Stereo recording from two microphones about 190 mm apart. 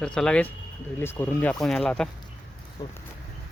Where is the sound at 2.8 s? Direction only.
20° left (ahead or behind).